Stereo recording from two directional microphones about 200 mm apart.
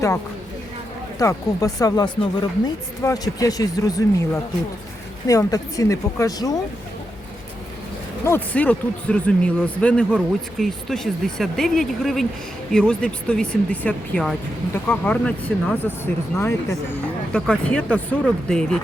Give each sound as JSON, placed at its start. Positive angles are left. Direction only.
{"t": 1.2, "sound": "speech", "side_deg": 15}
{"t": 8.2, "sound": "speech", "side_deg": 10}